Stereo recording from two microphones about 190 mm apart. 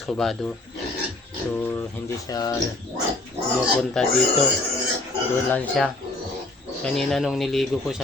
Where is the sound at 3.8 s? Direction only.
Centre (ahead or behind).